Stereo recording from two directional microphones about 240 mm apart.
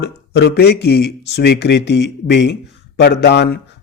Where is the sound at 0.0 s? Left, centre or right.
Left.